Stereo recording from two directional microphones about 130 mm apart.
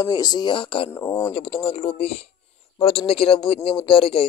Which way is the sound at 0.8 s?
20° left (ahead or behind).